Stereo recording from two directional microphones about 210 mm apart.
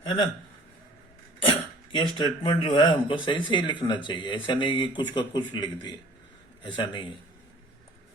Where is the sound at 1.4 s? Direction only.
20° left (ahead or behind).